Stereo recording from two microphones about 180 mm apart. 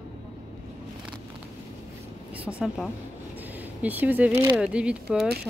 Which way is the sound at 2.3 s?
5° right (ahead or behind).